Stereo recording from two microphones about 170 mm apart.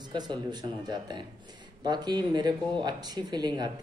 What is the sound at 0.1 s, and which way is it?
Speech, 25° right (ahead or behind).